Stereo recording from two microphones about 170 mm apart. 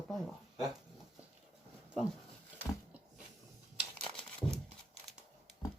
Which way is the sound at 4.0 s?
5° left (ahead or behind).